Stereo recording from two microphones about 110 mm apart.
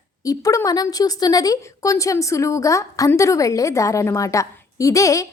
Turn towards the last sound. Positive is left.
turn(degrees=30)  # may be behind; listen again after turning